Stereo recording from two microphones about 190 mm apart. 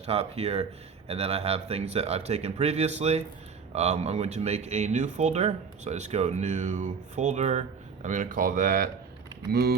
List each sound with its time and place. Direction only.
0.0 s speech: 35° right (ahead or behind)
9.5 s speech: 55° right (ahead or behind)